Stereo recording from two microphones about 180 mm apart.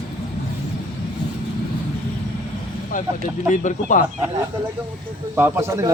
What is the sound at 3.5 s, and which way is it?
Speech, 45° left (ahead or behind).